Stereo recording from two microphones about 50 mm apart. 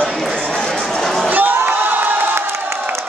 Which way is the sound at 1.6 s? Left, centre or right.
Right.